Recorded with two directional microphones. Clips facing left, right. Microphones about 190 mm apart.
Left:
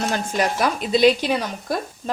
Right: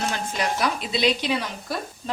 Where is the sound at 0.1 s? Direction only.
50° left (ahead or behind).